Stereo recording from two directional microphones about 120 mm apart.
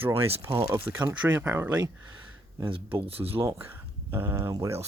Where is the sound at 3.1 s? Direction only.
55° right (ahead or behind).